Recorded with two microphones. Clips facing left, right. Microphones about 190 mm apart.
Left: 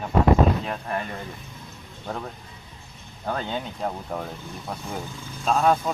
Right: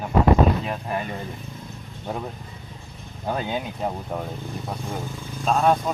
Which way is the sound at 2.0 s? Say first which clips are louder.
Right 2 dB; 15° right (ahead or behind).